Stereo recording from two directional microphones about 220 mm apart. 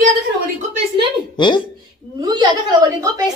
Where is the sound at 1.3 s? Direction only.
20° left (ahead or behind).